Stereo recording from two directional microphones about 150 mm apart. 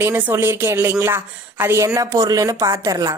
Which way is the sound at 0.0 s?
15° right (ahead or behind).